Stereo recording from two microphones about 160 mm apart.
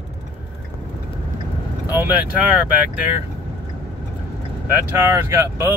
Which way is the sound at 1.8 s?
10° right (ahead or behind).